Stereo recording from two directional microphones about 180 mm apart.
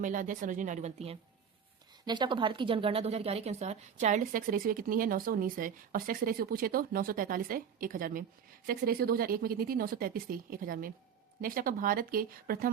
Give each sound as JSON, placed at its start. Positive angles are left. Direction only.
{"t": 0.0, "sound": "a woman's voice", "side_deg": -45}
{"t": 2.0, "sound": "a woman's voice", "side_deg": -25}